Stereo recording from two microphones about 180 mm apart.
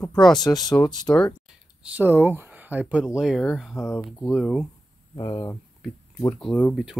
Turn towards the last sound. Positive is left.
turn(degrees=0)  # may be behind; listen again after turning